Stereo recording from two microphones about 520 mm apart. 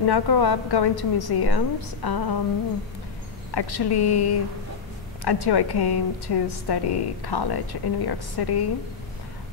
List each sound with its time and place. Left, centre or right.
0.0 s a woman's voice: left
3.5 s a woman's voice: left